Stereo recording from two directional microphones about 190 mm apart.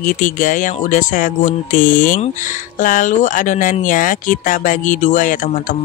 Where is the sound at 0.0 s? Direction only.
45° left (ahead or behind).